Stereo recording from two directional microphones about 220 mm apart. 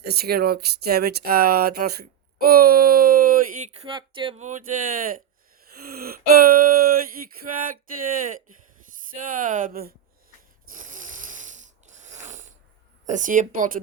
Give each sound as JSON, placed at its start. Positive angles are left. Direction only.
{"t": 0.0, "sound": "speech", "side_deg": -45}
{"t": 3.8, "sound": "speech", "side_deg": -20}
{"t": 5.7, "sound": "a sound", "side_deg": -45}
{"t": 7.5, "sound": "speech", "side_deg": -40}
{"t": 10.7, "sound": "snoring", "side_deg": -35}
{"t": 13.1, "sound": "speech", "side_deg": -35}